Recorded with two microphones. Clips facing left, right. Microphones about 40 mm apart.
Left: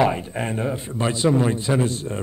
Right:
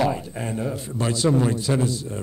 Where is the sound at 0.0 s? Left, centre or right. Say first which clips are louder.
Left 3 dB; left.